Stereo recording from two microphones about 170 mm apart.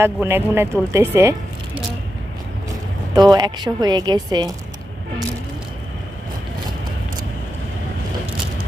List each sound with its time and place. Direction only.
0.0 s speech: 15° right (ahead or behind)
3.2 s speech: 25° right (ahead or behind)